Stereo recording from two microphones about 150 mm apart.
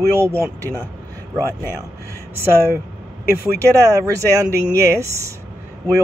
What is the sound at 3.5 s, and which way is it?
Speech, 20° right (ahead or behind).